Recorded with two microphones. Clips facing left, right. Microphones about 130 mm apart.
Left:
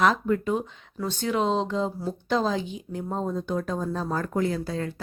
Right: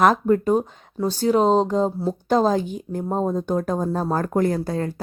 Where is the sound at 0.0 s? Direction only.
45° right (ahead or behind).